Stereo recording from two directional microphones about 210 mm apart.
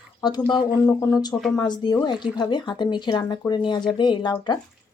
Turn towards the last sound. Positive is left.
turn(degrees=20)  # may be behind; listen again after turning